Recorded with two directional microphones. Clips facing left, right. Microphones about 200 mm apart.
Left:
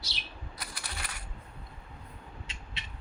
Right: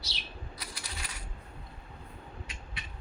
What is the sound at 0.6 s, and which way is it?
Coin, 60° left (ahead or behind).